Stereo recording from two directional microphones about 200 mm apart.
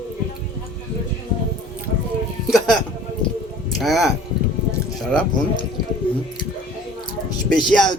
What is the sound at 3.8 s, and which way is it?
Speech, centre (ahead or behind).